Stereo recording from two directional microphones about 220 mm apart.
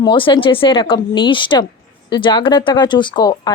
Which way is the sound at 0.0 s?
20° left (ahead or behind).